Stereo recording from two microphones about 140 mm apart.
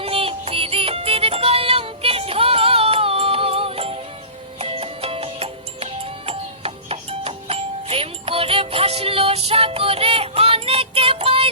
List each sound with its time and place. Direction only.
0.0 s music: 40° right (ahead or behind)